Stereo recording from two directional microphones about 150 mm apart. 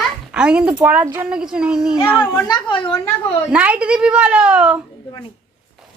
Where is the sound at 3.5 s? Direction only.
10° right (ahead or behind).